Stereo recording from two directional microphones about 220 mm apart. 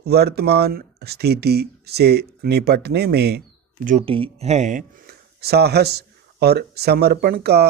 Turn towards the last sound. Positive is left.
turn(degrees=-45)  # may be behind; listen again after turning